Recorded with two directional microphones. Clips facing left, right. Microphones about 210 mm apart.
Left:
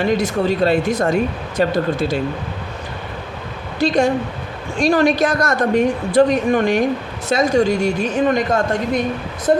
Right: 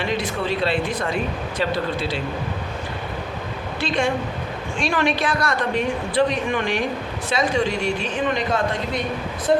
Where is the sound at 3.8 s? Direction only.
40° left (ahead or behind).